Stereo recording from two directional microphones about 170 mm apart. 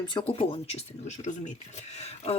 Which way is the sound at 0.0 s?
30° left (ahead or behind).